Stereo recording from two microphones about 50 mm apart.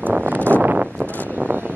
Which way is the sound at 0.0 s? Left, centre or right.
Right.